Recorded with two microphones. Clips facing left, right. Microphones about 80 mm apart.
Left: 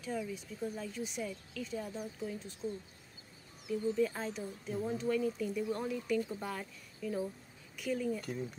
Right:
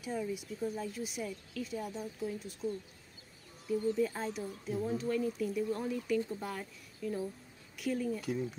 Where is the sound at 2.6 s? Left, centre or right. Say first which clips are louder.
Right 3 dB; centre.